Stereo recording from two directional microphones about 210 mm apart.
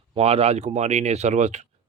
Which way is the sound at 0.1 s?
30° right (ahead or behind).